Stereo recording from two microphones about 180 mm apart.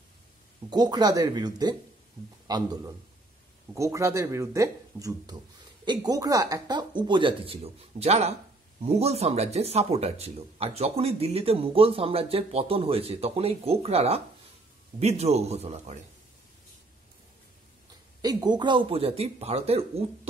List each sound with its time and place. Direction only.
0.7 s a man's voice: 25° right (ahead or behind)
18.2 s speech: 20° right (ahead or behind)